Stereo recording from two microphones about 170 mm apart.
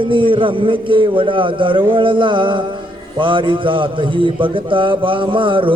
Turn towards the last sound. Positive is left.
turn(degrees=-30)  # may be behind; listen again after turning